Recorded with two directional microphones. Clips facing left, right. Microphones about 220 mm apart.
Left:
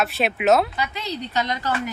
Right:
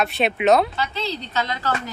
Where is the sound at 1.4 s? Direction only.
15° left (ahead or behind).